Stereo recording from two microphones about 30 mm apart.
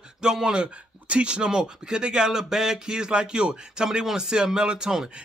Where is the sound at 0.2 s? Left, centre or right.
Right.